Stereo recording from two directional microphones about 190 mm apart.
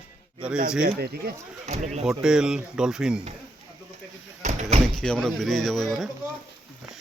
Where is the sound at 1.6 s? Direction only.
35° right (ahead or behind).